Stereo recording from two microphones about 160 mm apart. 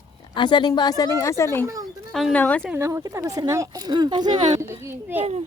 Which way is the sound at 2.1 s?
Centre (ahead or behind).